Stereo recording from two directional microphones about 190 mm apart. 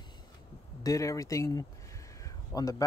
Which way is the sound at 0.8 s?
15° left (ahead or behind).